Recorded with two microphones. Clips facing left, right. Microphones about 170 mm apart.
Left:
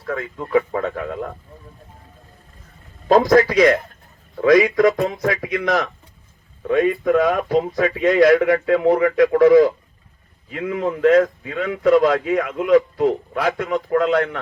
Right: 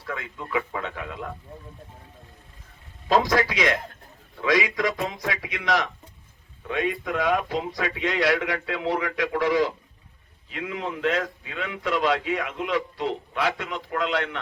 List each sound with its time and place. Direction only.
0.0 s speech: 45° left (ahead or behind)
3.1 s speech: 45° left (ahead or behind)